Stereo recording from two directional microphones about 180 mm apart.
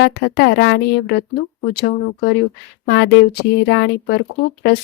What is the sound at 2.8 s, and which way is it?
A woman's voice, 75° left (ahead or behind).